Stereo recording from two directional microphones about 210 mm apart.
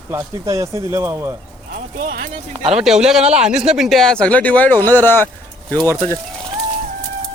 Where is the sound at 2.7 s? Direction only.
Centre (ahead or behind).